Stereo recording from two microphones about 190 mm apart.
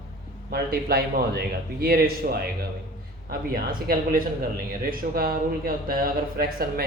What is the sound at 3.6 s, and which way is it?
Speech, 50° right (ahead or behind).